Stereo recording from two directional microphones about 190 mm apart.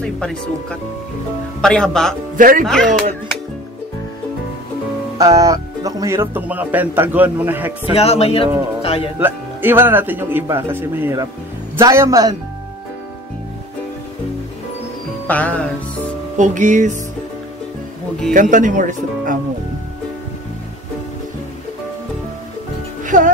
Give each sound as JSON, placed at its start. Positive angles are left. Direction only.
{"t": 0.0, "sound": "speech", "side_deg": 5}
{"t": 2.3, "sound": "speech", "side_deg": -45}
{"t": 2.6, "sound": "speech", "side_deg": 5}
{"t": 5.2, "sound": "music", "side_deg": -15}
{"t": 7.9, "sound": "speech", "side_deg": 35}
{"t": 9.2, "sound": "music", "side_deg": -10}
{"t": 15.2, "sound": "music", "side_deg": 10}
{"t": 16.3, "sound": "music", "side_deg": -40}
{"t": 18.3, "sound": "speech", "side_deg": -45}
{"t": 23.0, "sound": "speech", "side_deg": -40}